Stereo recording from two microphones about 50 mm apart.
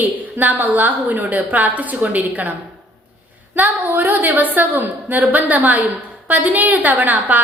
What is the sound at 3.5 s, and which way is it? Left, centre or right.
A woman's voice, right.